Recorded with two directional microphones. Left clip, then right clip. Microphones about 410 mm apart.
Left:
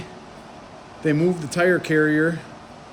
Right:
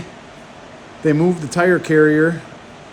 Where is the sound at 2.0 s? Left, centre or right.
Right.